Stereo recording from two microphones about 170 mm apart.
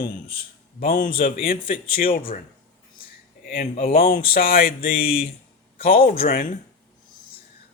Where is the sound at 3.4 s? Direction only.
60° left (ahead or behind).